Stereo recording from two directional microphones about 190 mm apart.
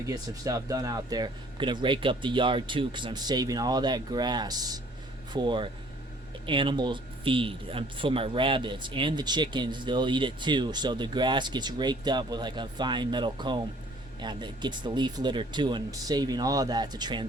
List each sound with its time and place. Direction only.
0.0 s speech: 20° right (ahead or behind)